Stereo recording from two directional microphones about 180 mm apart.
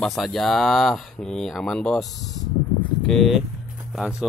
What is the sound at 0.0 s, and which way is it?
Speech, centre (ahead or behind).